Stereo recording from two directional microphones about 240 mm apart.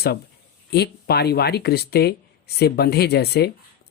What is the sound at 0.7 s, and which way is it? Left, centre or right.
Speech, left.